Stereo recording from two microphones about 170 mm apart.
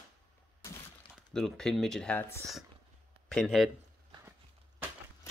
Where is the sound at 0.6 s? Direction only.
15° left (ahead or behind).